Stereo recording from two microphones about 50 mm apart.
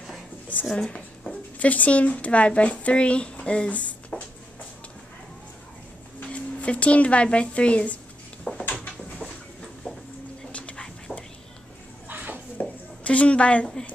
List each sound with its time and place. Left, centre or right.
0.7 s speech: centre
1.6 s speech: left
6.2 s speech: left
8.5 s a sound: left
9.8 s a sound: centre
10.5 s whispering: left
11.1 s whispering: centre
12.1 s dishes: right
12.5 s a sound: left